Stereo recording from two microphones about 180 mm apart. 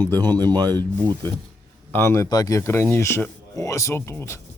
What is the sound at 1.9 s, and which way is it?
Speech, 15° left (ahead or behind).